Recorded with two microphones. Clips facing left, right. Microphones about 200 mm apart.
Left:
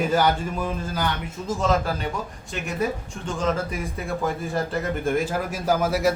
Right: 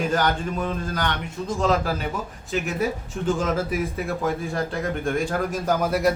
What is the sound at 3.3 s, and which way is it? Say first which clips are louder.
Speech: right 2 dB; 5° right (ahead or behind).